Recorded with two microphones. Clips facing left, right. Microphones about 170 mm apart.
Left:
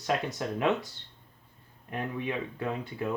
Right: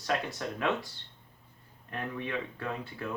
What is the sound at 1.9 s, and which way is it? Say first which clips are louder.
Speech: left 3 dB; 15° left (ahead or behind).